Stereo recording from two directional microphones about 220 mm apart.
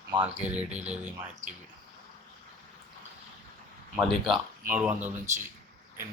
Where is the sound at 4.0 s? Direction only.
Centre (ahead or behind).